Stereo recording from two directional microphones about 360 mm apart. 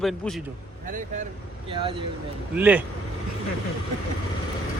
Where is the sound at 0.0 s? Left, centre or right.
Centre.